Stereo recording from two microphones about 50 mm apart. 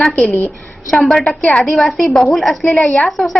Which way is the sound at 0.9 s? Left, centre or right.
Centre.